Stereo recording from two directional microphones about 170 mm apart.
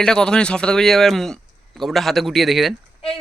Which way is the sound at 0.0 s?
5° left (ahead or behind).